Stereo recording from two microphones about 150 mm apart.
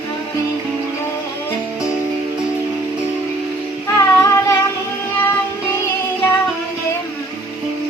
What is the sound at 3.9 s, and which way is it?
Music, 20° left (ahead or behind).